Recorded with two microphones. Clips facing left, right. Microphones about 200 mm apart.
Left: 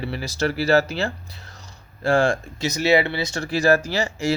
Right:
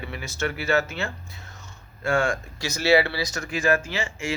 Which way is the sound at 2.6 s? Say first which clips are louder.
Left 1 dB; 20° left (ahead or behind).